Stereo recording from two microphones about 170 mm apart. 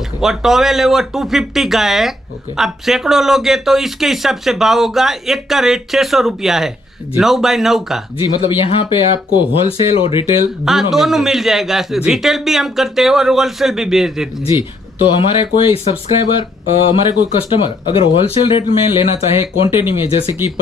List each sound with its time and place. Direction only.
0.2 s speech: centre (ahead or behind)
8.2 s speech: 30° left (ahead or behind)
10.6 s speech: centre (ahead or behind)
15.0 s speech: 30° left (ahead or behind)